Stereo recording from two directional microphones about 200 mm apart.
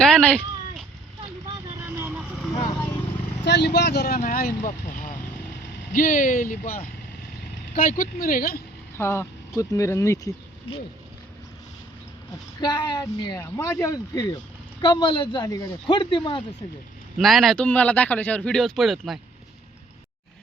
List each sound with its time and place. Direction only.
0.0 s cat: 5° left (ahead or behind)
3.4 s speech: 60° left (ahead or behind)
9.0 s speech: 10° left (ahead or behind)
12.5 s speech: 20° left (ahead or behind)
17.2 s speech: centre (ahead or behind)